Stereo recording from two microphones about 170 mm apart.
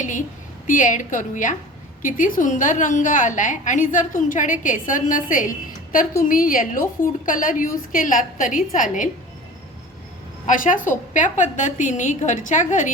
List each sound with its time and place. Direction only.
0.0 s a sound: 50° left (ahead or behind)
0.7 s a woman's voice: 50° left (ahead or behind)
10.4 s a woman's voice: 50° left (ahead or behind)